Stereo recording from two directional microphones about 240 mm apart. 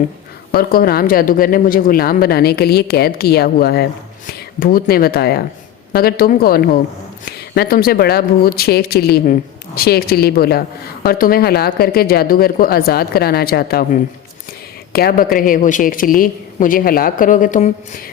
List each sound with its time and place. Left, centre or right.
0.5 s speech: left